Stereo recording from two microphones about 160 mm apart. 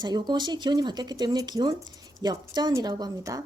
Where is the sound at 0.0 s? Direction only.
30° right (ahead or behind).